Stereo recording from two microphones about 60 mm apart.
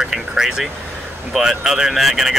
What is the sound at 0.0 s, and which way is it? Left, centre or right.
Vehicle, centre.